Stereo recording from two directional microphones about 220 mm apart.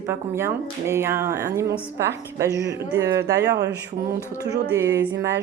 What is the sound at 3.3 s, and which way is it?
Speech, 50° right (ahead or behind).